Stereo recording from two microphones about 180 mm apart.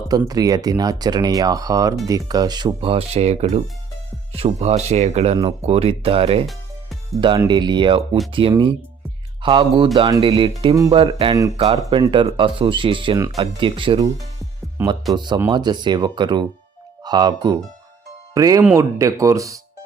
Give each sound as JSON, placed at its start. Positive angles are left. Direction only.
{"t": 0.3, "sound": "speech", "side_deg": -20}
{"t": 11.5, "sound": "speech", "side_deg": -35}
{"t": 14.8, "sound": "speech", "side_deg": -15}
{"t": 15.1, "sound": "speech", "side_deg": -25}